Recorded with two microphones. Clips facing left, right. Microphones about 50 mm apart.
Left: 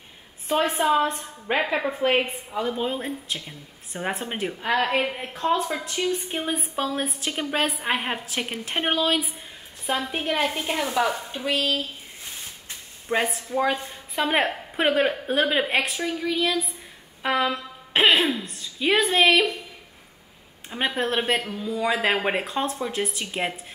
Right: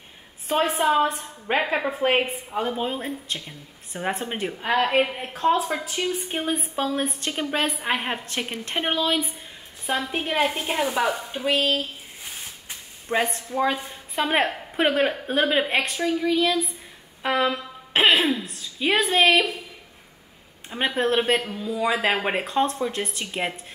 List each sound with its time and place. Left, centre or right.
0.5 s a woman's voice: centre
6.4 s a woman's voice: centre
10.2 s a woman's voice: centre
11.4 s speech: right
13.1 s a woman's voice: centre
20.7 s a woman's voice: centre